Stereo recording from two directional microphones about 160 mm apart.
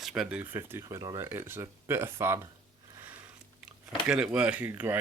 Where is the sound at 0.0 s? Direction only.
5° right (ahead or behind).